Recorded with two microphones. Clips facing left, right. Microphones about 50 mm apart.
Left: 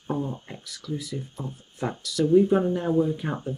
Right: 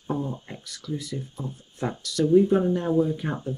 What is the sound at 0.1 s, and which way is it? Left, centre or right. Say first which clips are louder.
Speech: even; centre.